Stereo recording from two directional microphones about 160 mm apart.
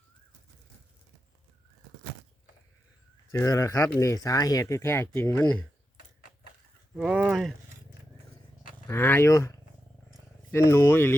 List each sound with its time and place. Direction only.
3.3 s speech: 20° left (ahead or behind)
6.9 s speech: 5° right (ahead or behind)
8.9 s speech: 15° left (ahead or behind)